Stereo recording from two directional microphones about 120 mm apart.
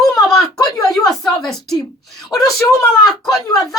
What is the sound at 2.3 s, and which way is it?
Speech, 30° left (ahead or behind).